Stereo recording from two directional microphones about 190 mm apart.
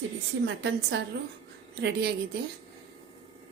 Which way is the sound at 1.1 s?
60° right (ahead or behind).